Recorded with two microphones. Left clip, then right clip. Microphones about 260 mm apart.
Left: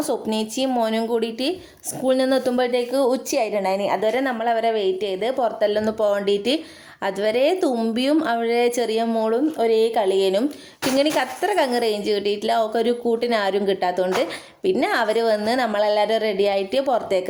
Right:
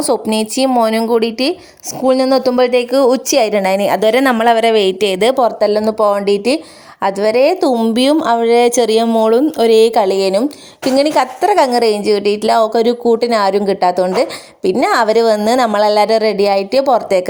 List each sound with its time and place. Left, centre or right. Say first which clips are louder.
0.0 s a woman's voice: right 9 dB; right